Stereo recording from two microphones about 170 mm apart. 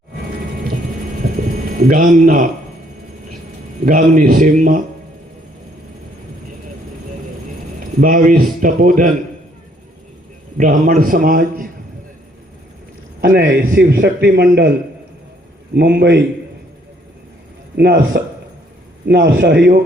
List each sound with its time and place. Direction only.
1.8 s a man's voice: 55° right (ahead or behind)
3.8 s a man's voice: 50° right (ahead or behind)
8.0 s a man's voice: 55° right (ahead or behind)
10.6 s a man's voice: 50° right (ahead or behind)
13.2 s a man's voice: 65° right (ahead or behind)
15.7 s a man's voice: 80° right
17.7 s a man's voice: 85° right